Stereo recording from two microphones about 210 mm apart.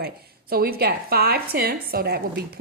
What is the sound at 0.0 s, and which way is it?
Speech, 50° right (ahead or behind).